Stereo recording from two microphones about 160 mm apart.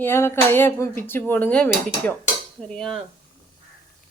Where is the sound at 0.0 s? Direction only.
15° left (ahead or behind).